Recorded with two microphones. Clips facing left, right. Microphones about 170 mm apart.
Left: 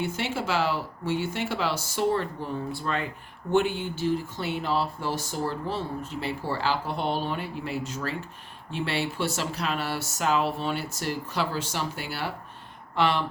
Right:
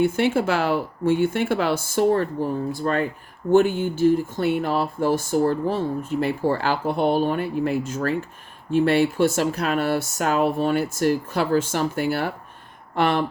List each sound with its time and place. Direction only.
0.0 s speech: 50° right (ahead or behind)